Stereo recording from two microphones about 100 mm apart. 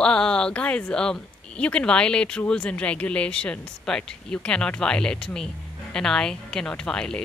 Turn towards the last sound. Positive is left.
turn(degrees=10)  # may be behind; listen again after turning